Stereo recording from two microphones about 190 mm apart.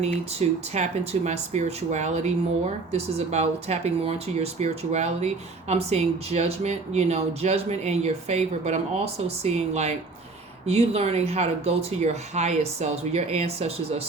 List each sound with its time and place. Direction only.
0.0 s speech: 35° right (ahead or behind)